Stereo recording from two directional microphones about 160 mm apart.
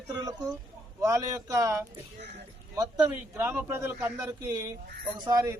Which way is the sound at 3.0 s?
15° right (ahead or behind).